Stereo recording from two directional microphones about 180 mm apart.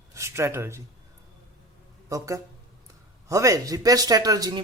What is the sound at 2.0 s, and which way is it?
Speech, 20° right (ahead or behind).